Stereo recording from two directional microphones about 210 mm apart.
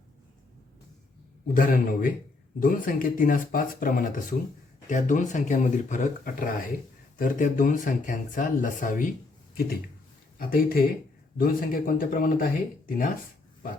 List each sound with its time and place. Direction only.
1.5 s speech: 40° left (ahead or behind)
10.3 s speech: 45° left (ahead or behind)